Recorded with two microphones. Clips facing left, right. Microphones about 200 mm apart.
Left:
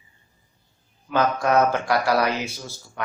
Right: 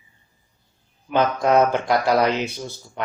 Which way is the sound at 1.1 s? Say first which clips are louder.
Right 2 dB; 20° right (ahead or behind).